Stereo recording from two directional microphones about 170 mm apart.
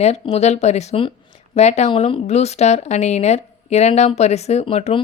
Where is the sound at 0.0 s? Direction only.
40° left (ahead or behind).